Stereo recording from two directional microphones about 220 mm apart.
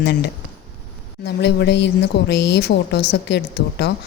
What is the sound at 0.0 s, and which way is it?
Speech, 45° left (ahead or behind).